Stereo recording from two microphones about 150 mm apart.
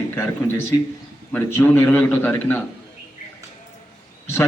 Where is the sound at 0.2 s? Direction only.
15° left (ahead or behind).